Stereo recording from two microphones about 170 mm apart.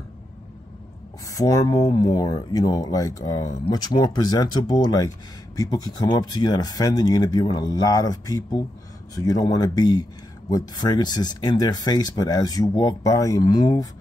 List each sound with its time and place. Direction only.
1.3 s speech: 20° left (ahead or behind)